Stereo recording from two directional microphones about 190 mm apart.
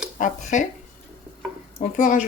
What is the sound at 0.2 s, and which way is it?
Speech, 40° left (ahead or behind).